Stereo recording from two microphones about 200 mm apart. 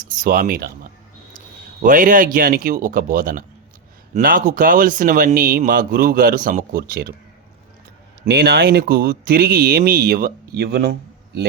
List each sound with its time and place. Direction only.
0.2 s speech: 45° right (ahead or behind)
1.8 s speech: 40° right (ahead or behind)
8.3 s speech: 55° right (ahead or behind)